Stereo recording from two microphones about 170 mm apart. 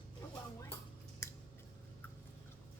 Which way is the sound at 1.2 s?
15° left (ahead or behind).